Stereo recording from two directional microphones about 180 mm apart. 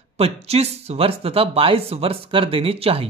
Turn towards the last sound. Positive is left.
turn(degrees=-30)  # may be behind; listen again after turning